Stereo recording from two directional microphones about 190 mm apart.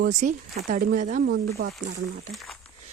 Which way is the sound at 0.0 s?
40° right (ahead or behind).